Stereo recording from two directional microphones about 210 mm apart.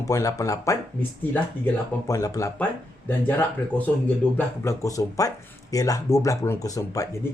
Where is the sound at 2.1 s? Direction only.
15° left (ahead or behind).